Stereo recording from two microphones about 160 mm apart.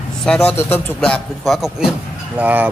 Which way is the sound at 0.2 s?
5° left (ahead or behind).